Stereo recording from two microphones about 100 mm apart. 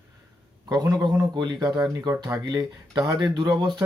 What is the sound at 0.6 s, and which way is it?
Speech, 40° right (ahead or behind).